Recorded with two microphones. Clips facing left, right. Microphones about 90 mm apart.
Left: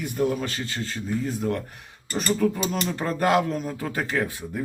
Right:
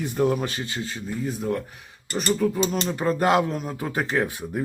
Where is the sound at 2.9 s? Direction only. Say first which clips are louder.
Right 1 dB; 15° right (ahead or behind).